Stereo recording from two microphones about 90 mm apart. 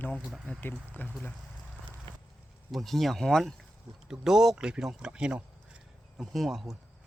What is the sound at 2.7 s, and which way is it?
Speech, centre (ahead or behind).